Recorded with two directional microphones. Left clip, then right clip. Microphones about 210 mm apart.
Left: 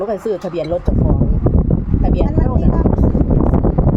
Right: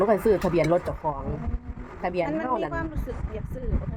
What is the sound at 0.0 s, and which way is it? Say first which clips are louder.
Speech: left 2 dB; 20° left (ahead or behind).